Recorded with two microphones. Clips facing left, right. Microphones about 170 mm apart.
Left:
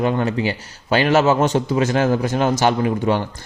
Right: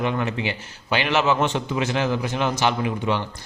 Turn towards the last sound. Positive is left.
turn(degrees=45)  # may be behind; listen again after turning